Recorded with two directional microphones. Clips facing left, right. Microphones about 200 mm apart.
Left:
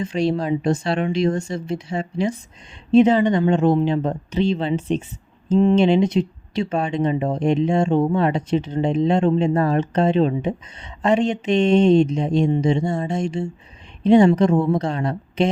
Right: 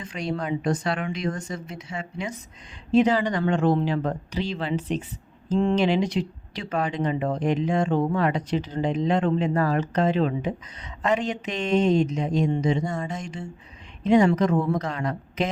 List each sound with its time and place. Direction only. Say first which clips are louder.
0.0 s speech: left 8 dB; 25° left (ahead or behind)